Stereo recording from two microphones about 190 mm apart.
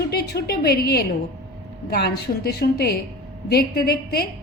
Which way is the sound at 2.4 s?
55° left (ahead or behind).